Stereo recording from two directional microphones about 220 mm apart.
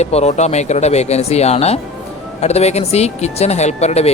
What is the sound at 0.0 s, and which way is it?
Speech, 30° left (ahead or behind).